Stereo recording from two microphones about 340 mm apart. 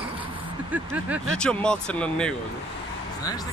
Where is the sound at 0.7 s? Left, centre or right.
Centre.